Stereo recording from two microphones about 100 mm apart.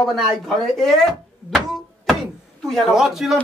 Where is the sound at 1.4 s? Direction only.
Centre (ahead or behind).